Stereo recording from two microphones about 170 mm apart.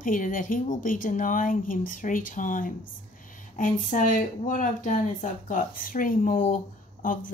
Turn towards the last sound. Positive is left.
turn(degrees=50)  # may be behind; listen again after turning